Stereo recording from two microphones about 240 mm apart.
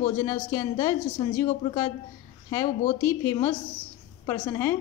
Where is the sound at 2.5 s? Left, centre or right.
Centre.